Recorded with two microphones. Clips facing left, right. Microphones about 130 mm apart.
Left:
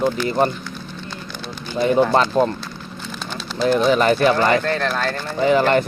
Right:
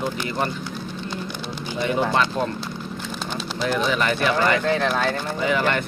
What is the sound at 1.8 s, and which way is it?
Speech, 35° left (ahead or behind).